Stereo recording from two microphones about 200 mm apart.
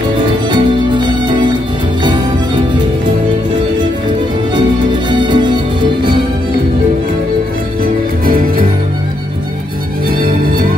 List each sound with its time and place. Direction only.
0.5 s music: 20° right (ahead or behind)
5.2 s music: 20° right (ahead or behind)